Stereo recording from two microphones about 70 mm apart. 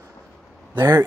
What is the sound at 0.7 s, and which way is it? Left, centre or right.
Speech, right.